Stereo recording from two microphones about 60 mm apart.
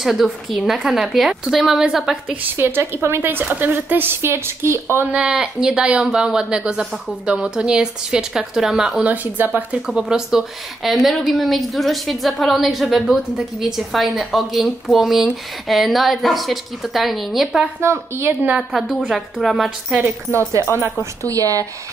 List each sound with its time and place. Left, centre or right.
0.0 s a woman's voice: centre
2.5 s a woman's voice: right
5.1 s speech: centre
9.0 s speech: right
10.0 s a woman's voice: centre
17.7 s speech: right
19.4 s a woman's voice: centre
20.6 s a woman's voice: right
21.0 s a woman's voice: right